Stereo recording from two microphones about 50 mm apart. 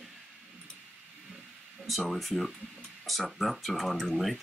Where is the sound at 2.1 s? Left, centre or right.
Centre.